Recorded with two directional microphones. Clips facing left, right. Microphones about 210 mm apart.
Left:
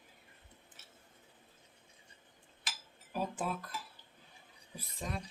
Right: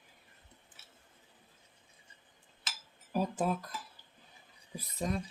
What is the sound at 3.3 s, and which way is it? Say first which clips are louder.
Speech: right 6 dB; 40° right (ahead or behind).